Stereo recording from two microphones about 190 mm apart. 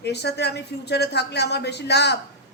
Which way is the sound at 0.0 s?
60° left (ahead or behind).